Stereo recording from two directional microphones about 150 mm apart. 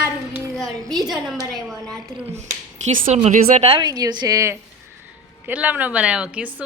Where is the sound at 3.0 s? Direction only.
45° right (ahead or behind).